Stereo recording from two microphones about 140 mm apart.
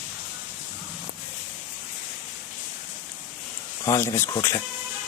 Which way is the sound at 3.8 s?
20° left (ahead or behind).